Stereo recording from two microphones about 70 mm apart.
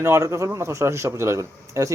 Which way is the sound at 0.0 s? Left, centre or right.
Right.